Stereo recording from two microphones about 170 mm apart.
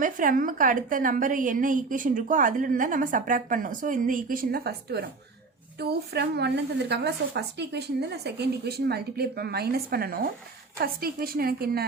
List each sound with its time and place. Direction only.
0.0 s a woman's voice: 50° right (ahead or behind)